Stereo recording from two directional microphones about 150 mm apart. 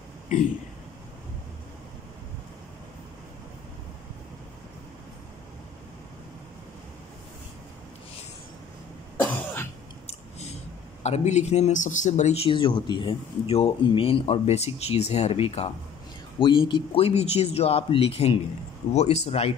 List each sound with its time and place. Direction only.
9.1 s cough: 15° left (ahead or behind)
10.0 s speech: 50° left (ahead or behind)